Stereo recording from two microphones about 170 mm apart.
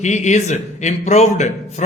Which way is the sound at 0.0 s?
45° left (ahead or behind).